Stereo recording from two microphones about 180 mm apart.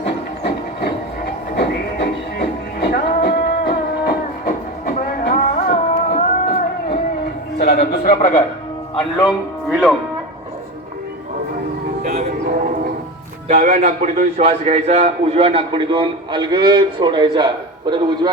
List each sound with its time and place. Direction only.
0.0 s a sound: 65° left (ahead or behind)
1.5 s music: 65° left (ahead or behind)
6.1 s music: 40° left (ahead or behind)
7.6 s music: 60° left (ahead or behind)
9.1 s speech: centre (ahead or behind)
12.0 s a sound: 50° right (ahead or behind)
13.7 s a man's voice: 50° right (ahead or behind); by 18.3 s 25° right (ahead or behind)